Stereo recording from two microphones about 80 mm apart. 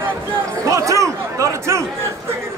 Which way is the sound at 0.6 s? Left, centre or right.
Right.